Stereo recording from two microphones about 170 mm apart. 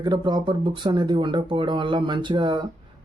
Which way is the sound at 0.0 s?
25° right (ahead or behind).